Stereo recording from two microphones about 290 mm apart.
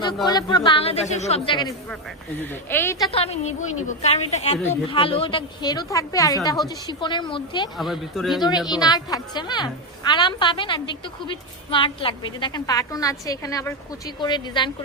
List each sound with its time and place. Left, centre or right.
0.3 s a woman's voice: centre
7.8 s speech: centre
8.4 s a woman's voice: centre